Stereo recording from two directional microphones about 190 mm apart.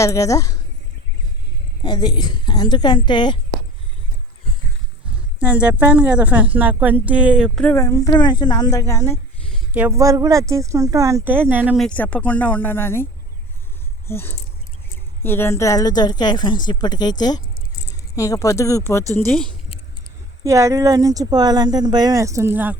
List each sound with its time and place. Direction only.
0.0 s a woman's voice: 15° left (ahead or behind)
1.8 s speech: 20° left (ahead or behind)
5.4 s speech: 5° right (ahead or behind)
7.6 s a woman's voice: 15° left (ahead or behind)
9.7 s speech: 10° right (ahead or behind)
11.9 s a woman's voice: 10° left (ahead or behind)
14.1 s a woman's voice: 10° left (ahead or behind)
20.4 s speech: 15° right (ahead or behind)